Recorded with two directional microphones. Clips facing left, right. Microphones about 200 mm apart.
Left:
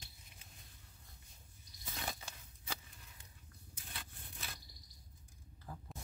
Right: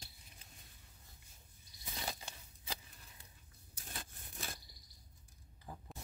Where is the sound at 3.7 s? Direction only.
45° right (ahead or behind).